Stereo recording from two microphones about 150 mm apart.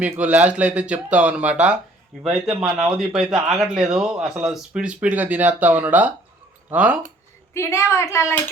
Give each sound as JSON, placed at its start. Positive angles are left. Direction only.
{"t": 0.0, "sound": "speech", "side_deg": -10}
{"t": 7.5, "sound": "speech", "side_deg": 20}